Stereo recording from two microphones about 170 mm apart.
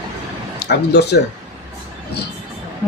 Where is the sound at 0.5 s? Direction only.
75° left (ahead or behind).